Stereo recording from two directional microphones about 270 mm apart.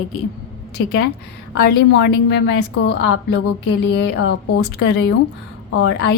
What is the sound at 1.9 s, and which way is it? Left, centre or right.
A woman's voice, left.